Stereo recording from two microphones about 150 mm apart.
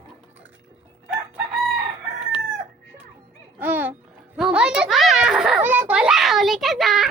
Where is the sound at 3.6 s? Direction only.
10° right (ahead or behind).